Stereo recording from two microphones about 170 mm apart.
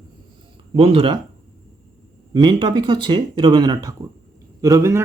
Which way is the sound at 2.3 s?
25° right (ahead or behind).